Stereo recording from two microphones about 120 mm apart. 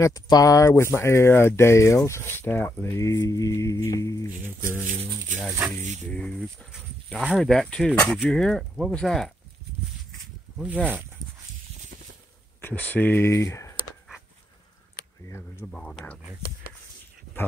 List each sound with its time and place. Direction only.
0.0 s speech: 30° left (ahead or behind)
6.0 s speech: 10° left (ahead or behind)
12.6 s speech: 15° left (ahead or behind)
15.2 s speech: 20° left (ahead or behind)
15.6 s speech: 5° left (ahead or behind)